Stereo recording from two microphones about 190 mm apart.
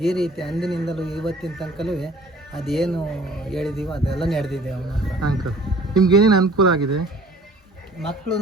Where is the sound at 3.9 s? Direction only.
30° left (ahead or behind).